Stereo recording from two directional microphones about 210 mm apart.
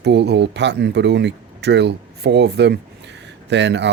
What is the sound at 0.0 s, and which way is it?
Speech, 55° right (ahead or behind).